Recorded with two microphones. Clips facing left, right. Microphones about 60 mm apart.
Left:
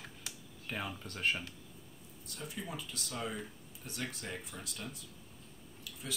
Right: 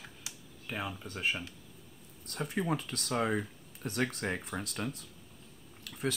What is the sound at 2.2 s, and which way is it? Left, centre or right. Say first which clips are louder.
Speech: right 10 dB; right.